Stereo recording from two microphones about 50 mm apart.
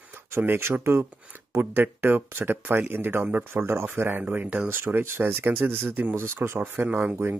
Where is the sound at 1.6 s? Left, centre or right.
Right.